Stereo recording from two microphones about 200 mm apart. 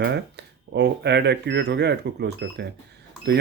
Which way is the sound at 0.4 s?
55° right (ahead or behind).